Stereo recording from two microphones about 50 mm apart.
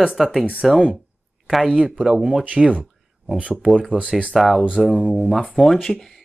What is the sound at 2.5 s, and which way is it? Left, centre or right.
Speech, right.